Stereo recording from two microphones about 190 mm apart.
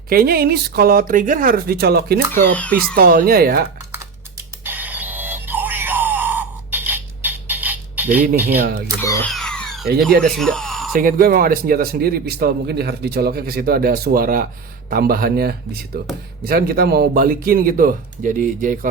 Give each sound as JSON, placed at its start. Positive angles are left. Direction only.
{"t": 0.1, "sound": "a man's voice", "side_deg": -50}
{"t": 2.5, "sound": "speech", "side_deg": 5}
{"t": 2.9, "sound": "a man's voice", "side_deg": -50}
{"t": 4.6, "sound": "a sound", "side_deg": -10}
{"t": 8.4, "sound": "speech", "side_deg": -10}
{"t": 9.0, "sound": "speech", "side_deg": 15}
{"t": 9.3, "sound": "a sound", "side_deg": 5}
{"t": 10.2, "sound": "speech", "side_deg": 5}
{"t": 10.9, "sound": "a man's voice", "side_deg": -50}